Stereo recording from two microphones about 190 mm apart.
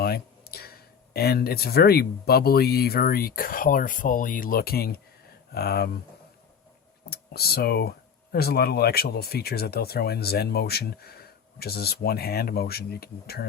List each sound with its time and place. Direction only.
0.0 s speech: 55° left (ahead or behind)
7.1 s speech: 55° left (ahead or behind)